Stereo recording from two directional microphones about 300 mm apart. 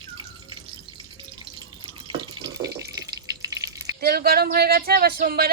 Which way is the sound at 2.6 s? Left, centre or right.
Right.